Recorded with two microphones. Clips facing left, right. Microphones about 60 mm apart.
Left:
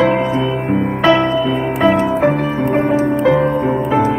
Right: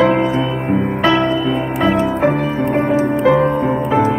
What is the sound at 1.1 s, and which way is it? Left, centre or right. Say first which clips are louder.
Music: left 1 dB; left.